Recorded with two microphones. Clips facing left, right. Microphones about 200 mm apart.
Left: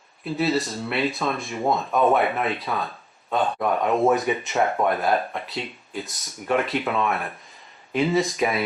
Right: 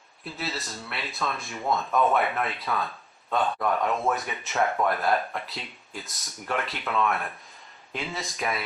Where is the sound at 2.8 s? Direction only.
Centre (ahead or behind).